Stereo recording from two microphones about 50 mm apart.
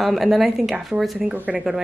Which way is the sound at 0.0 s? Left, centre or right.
Centre.